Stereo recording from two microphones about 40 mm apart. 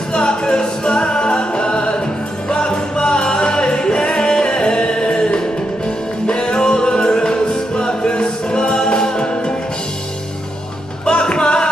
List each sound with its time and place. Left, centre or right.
0.1 s music: left
11.1 s music: left